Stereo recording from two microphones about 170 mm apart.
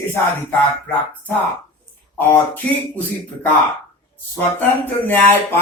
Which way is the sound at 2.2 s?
10° left (ahead or behind).